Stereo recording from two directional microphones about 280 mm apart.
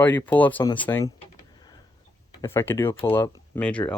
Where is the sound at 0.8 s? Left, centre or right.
Centre.